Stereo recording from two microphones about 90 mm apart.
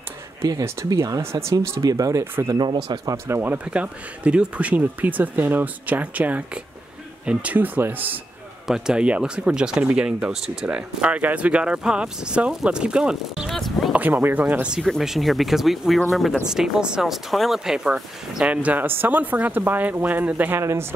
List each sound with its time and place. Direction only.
0.4 s speech: 40° right (ahead or behind)
2.6 s speech: 55° right (ahead or behind)
3.3 s speech: 25° right (ahead or behind)
8.6 s speech: 5° right (ahead or behind)
13.5 s a sound: centre (ahead or behind)
13.9 s speech: 20° right (ahead or behind)
14.8 s speech: centre (ahead or behind); by 20.8 s 30° right (ahead or behind)